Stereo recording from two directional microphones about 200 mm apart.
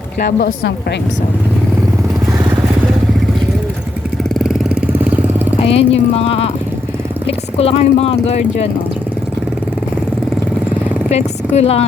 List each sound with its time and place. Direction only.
0.2 s a woman's voice: 50° left (ahead or behind)
4.2 s vehicle: centre (ahead or behind)
5.5 s speech: 30° left (ahead or behind)
11.1 s a woman's voice: 30° left (ahead or behind)